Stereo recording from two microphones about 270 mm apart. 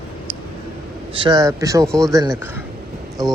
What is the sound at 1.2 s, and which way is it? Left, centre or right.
Speech, centre.